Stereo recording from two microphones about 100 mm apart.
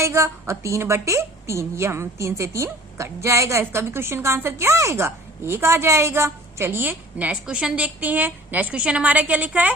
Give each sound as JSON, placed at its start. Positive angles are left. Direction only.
{"t": 0.0, "sound": "a woman's voice", "side_deg": -30}